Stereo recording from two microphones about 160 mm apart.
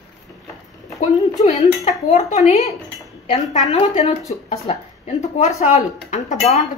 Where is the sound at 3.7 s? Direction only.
40° left (ahead or behind).